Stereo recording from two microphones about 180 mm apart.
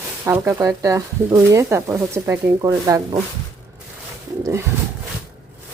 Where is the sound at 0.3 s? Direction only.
15° right (ahead or behind).